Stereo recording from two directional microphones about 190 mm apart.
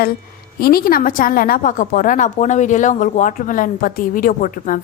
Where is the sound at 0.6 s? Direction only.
50° left (ahead or behind).